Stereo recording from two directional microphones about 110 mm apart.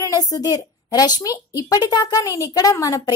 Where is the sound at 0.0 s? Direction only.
35° left (ahead or behind).